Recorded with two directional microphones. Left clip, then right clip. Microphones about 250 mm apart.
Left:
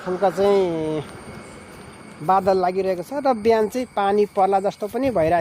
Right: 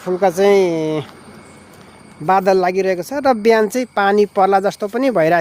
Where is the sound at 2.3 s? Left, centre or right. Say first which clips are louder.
Right 4 dB; right.